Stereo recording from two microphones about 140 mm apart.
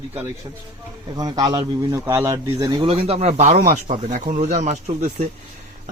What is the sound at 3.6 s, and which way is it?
Speech, 65° right (ahead or behind).